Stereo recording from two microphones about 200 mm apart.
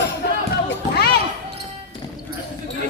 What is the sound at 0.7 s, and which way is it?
Speech, 55° left (ahead or behind).